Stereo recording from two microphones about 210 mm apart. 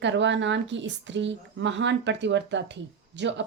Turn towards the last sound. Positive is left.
turn(degrees=-55)  # may be behind; listen again after turning